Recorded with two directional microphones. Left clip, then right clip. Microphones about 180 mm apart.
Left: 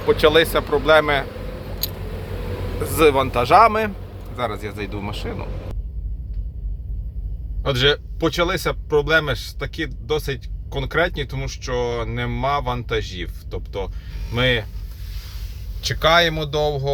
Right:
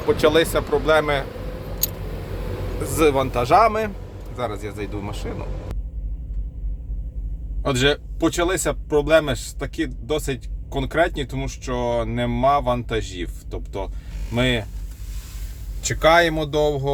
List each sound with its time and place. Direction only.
0.1 s speech: 15° right (ahead or behind)
2.8 s speech: 10° right (ahead or behind)
5.3 s vehicle: 5° right (ahead or behind)
7.6 s speech: 25° right (ahead or behind)
14.3 s speech: 20° right (ahead or behind)
15.8 s speech: 15° right (ahead or behind)